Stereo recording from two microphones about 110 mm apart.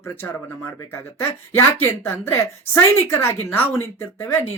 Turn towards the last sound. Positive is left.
turn(degrees=25)  # may be behind; listen again after turning